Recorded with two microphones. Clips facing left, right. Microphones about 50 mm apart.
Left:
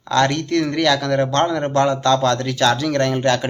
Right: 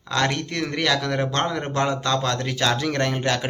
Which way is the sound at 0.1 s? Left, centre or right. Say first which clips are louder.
Left 6 dB; centre.